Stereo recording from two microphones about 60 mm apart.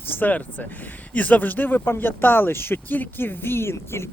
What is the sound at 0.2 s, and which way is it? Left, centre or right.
Speech, left.